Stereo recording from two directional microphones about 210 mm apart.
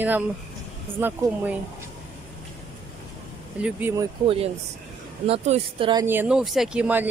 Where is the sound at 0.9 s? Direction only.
10° right (ahead or behind).